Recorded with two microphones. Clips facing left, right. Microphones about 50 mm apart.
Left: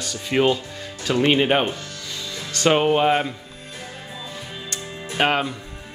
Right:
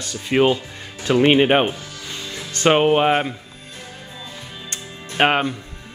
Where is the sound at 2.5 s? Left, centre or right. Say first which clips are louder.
Right 2 dB; right.